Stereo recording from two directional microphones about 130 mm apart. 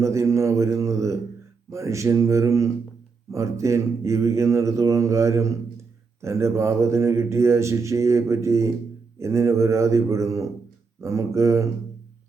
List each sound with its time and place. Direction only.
0.0 s mantra: 25° right (ahead or behind)
1.7 s speech: 25° right (ahead or behind)